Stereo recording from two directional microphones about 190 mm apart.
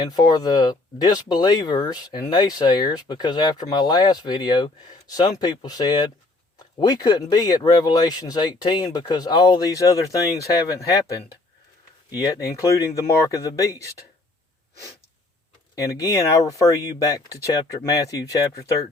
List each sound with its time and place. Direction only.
0.1 s speech: 20° left (ahead or behind)
12.1 s speech: 15° left (ahead or behind)
15.7 s speech: 15° left (ahead or behind)